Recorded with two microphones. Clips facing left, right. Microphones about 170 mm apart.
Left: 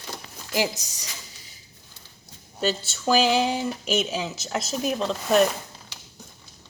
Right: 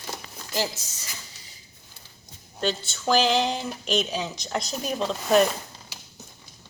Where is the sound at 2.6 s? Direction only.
5° left (ahead or behind).